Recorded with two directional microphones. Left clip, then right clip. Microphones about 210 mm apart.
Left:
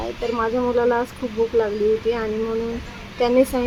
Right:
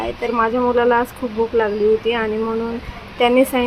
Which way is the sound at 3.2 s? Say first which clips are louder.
Right 3 dB; 10° right (ahead or behind).